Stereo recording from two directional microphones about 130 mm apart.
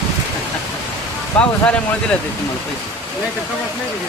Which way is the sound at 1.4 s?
10° left (ahead or behind).